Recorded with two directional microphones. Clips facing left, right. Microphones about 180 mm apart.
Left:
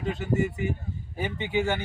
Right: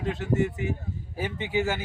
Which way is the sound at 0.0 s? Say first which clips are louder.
Right 1 dB; centre (ahead or behind).